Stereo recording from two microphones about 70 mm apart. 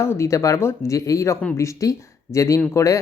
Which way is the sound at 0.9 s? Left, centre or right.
Left.